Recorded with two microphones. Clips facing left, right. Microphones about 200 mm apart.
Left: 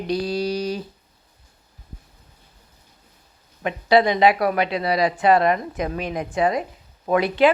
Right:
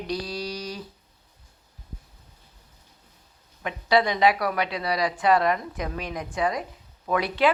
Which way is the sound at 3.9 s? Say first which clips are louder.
Left 4 dB; 25° left (ahead or behind).